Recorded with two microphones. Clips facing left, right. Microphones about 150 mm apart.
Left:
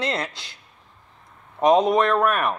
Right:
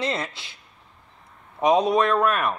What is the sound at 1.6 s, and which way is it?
A man's voice, centre (ahead or behind).